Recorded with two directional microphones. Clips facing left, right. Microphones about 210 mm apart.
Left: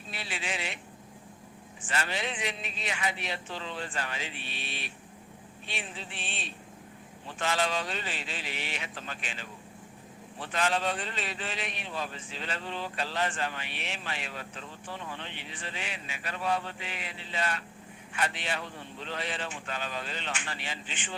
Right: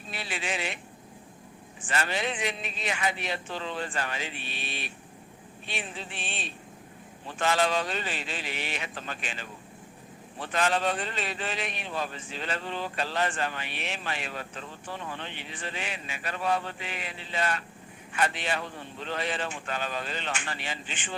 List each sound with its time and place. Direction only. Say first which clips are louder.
0.1 s speech: right 3 dB; 50° right (ahead or behind)
1.9 s a man's voice: right 3 dB; 50° right (ahead or behind)